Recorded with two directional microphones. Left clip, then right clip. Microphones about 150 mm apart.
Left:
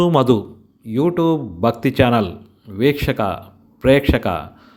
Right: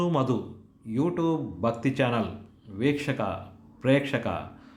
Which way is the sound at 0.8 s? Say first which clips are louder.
Left 10 dB; 50° left (ahead or behind).